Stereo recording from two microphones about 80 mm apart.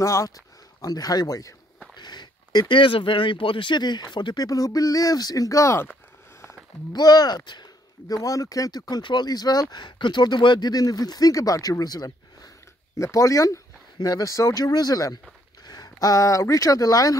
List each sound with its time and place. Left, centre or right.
0.0 s speech: left
0.7 s speech: left
2.0 s a sound: left
2.7 s speech: left
4.5 s speech: left
6.9 s speech: left
12.9 s speech: left